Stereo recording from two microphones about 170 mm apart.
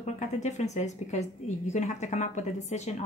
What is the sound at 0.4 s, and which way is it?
A woman's voice, 45° left (ahead or behind).